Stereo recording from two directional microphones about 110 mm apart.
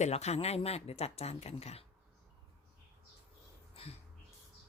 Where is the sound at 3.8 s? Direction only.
60° left (ahead or behind).